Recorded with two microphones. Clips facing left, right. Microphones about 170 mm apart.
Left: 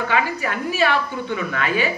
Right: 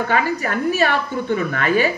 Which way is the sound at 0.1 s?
45° right (ahead or behind).